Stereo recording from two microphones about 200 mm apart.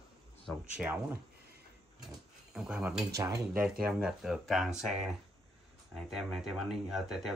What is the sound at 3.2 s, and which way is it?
Speech, 15° right (ahead or behind).